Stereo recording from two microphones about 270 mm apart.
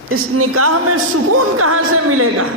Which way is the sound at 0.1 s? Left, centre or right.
Right.